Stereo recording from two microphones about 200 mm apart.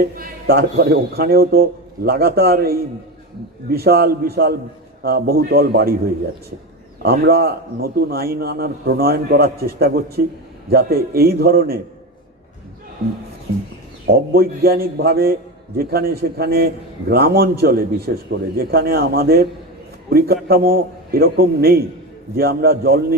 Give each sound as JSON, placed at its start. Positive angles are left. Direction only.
{"t": 0.0, "sound": "a man's voice", "side_deg": -50}
{"t": 7.0, "sound": "a man's voice", "side_deg": -50}
{"t": 14.1, "sound": "a man's voice", "side_deg": -50}